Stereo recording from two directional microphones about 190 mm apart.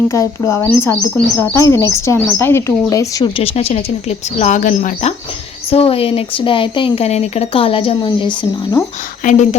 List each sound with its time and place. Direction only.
0.1 s a woman's voice: 15° left (ahead or behind); by 5.1 s 40° left (ahead or behind)
5.7 s speech: 30° left (ahead or behind)
9.2 s speech: 40° left (ahead or behind)